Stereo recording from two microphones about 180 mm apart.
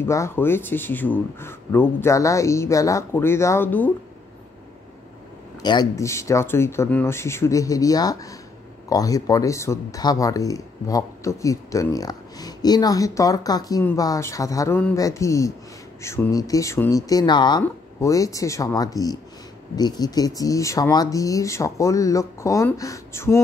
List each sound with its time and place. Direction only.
0.0 s speech: 15° left (ahead or behind)
5.6 s speech: 25° left (ahead or behind)